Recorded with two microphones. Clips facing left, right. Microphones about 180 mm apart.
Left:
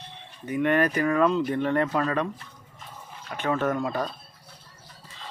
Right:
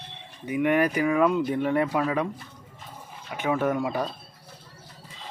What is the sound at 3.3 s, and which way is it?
Speech, 10° right (ahead or behind).